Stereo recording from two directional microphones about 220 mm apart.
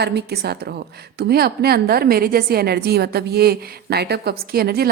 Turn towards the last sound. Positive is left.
turn(degrees=-45)  # may be behind; listen again after turning